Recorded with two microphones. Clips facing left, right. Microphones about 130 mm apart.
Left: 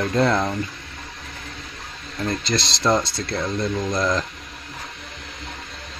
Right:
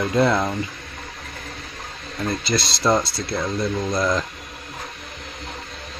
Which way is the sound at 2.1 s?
5° right (ahead or behind).